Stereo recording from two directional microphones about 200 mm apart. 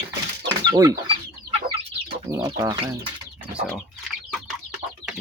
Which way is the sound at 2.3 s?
15° right (ahead or behind).